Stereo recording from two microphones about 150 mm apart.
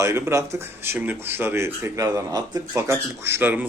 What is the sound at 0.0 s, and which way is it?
Speech, 20° right (ahead or behind).